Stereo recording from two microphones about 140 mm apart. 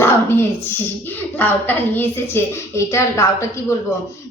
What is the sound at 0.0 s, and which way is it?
A woman's voice, 15° left (ahead or behind).